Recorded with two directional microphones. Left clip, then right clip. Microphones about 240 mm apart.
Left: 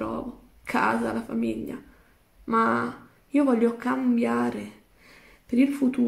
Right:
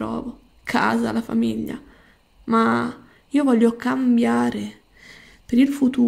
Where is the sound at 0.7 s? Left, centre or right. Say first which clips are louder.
Right 4 dB; right.